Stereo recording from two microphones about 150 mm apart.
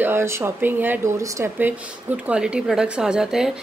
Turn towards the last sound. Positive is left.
turn(degrees=-5)  # may be behind; listen again after turning